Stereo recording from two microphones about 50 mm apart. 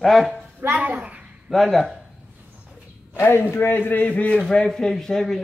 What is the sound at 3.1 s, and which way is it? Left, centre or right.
A man's voice, left.